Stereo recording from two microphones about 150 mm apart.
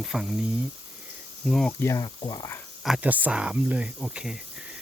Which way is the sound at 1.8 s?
20° left (ahead or behind).